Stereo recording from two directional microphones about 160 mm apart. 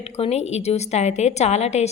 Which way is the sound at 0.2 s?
40° left (ahead or behind).